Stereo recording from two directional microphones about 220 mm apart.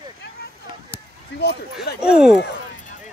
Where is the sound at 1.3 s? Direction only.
50° left (ahead or behind).